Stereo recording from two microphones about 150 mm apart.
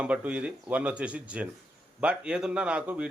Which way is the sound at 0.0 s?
10° right (ahead or behind).